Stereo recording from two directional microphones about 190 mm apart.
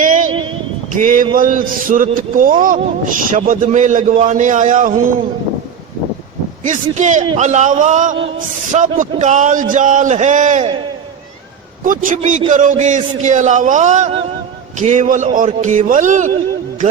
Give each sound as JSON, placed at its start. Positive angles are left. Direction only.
{"t": 0.0, "sound": "a sound", "side_deg": -40}
{"t": 0.9, "sound": "a man's voice", "side_deg": -45}
{"t": 6.7, "sound": "a man's voice", "side_deg": -40}
{"t": 11.9, "sound": "a man's voice", "side_deg": -40}